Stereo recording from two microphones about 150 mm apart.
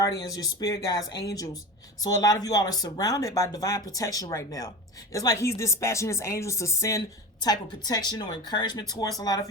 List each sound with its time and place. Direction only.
0.3 s speech: 25° left (ahead or behind)